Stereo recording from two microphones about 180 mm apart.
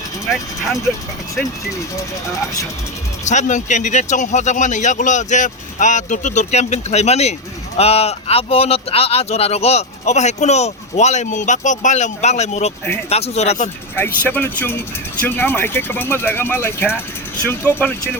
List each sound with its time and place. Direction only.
0.3 s speech: centre (ahead or behind)
3.2 s speech: 40° left (ahead or behind)
13.9 s speech: 10° left (ahead or behind)